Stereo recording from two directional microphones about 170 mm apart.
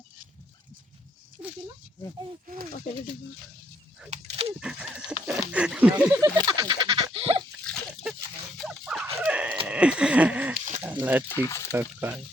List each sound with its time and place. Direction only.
4.1 s dog: 35° right (ahead or behind)
4.6 s a sound: 5° right (ahead or behind)
5.2 s speech: 5° right (ahead or behind)
6.3 s a sound: 25° right (ahead or behind)
7.6 s pig: 5° left (ahead or behind)
8.5 s dog: centre (ahead or behind)
9.2 s a sound: 10° right (ahead or behind)
11.3 s speech: 15° left (ahead or behind)
11.7 s speech: 15° right (ahead or behind)